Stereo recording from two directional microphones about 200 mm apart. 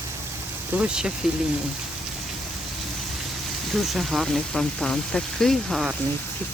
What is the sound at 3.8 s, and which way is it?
Speech, centre (ahead or behind).